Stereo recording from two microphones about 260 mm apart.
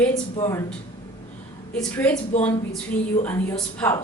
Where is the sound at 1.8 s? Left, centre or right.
Centre.